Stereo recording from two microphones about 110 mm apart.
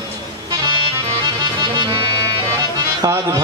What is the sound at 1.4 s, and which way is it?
Music, 45° right (ahead or behind).